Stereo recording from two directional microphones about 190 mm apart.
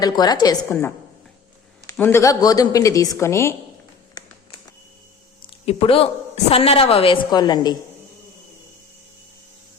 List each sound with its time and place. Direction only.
0.0 s a woman's voice: 20° left (ahead or behind)
5.5 s a woman's voice: 30° left (ahead or behind)